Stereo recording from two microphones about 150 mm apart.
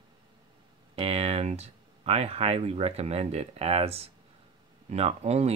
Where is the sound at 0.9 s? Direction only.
40° right (ahead or behind).